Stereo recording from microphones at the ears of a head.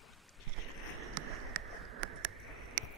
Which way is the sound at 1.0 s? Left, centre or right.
Right.